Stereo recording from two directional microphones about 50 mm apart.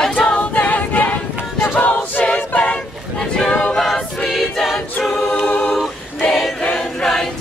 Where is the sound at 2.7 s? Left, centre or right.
Centre.